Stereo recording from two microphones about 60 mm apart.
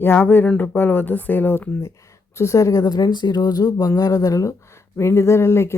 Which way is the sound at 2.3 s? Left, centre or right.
Left.